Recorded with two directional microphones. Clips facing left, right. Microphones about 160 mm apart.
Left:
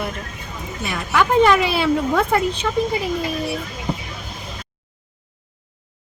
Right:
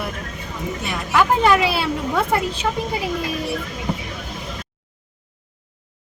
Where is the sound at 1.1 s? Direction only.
Centre (ahead or behind).